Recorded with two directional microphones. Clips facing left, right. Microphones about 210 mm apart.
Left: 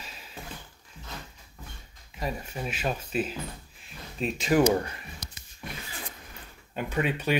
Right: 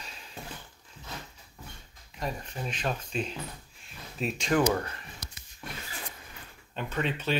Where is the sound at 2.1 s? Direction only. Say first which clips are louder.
Left 2 dB; 5° left (ahead or behind).